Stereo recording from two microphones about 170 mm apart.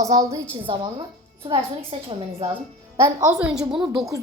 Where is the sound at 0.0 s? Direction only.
20° right (ahead or behind).